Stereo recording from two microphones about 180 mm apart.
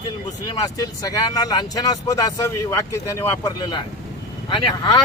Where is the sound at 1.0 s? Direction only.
20° left (ahead or behind).